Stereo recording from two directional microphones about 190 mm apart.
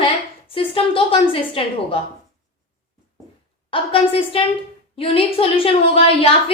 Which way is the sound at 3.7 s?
30° left (ahead or behind).